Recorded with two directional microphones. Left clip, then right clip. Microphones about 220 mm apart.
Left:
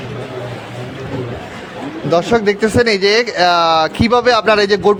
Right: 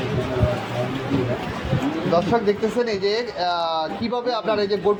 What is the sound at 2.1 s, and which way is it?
Speech, 50° left (ahead or behind).